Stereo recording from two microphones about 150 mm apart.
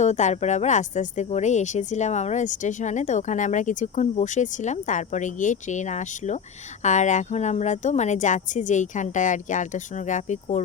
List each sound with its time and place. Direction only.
0.0 s speech: 50° left (ahead or behind)